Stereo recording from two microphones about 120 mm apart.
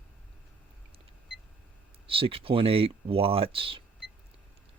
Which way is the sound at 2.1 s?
50° right (ahead or behind).